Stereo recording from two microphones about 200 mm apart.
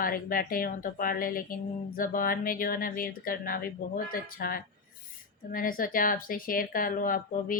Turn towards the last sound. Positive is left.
turn(degrees=45)  # may be behind; listen again after turning